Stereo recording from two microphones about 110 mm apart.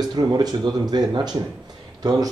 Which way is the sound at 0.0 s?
40° right (ahead or behind).